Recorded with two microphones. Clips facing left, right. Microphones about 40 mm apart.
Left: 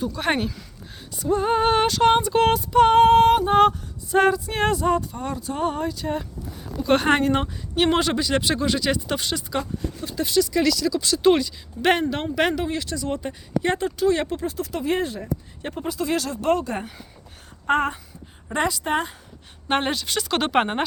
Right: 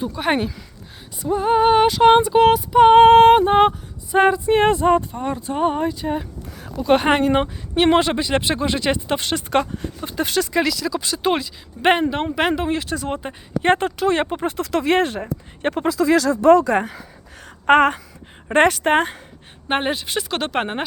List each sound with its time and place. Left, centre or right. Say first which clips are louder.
0.0 s a sound: right 3 dB; centre
2.9 s speech: right 6 dB; right
9.2 s speech: right 6 dB; right
10.0 s speech: even; right
10.8 s speech: left 1 dB; right
13.6 s speech: right 4 dB; right
14.7 s a woman's voice: right 7 dB; right
15.6 s speech: right 10 dB; right
17.7 s a woman's voice: right 8 dB; right
18.4 s a woman's voice: right 8 dB; right
19.6 s a sound: right 2 dB; centre
20.3 s speech: left 3 dB; centre